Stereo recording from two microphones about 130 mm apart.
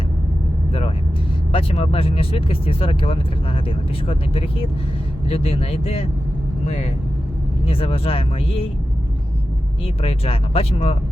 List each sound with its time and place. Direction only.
0.7 s vehicle: 45° left (ahead or behind)
1.5 s speech: 50° left (ahead or behind)
7.7 s speech: 45° left (ahead or behind)
9.8 s speech: 50° left (ahead or behind)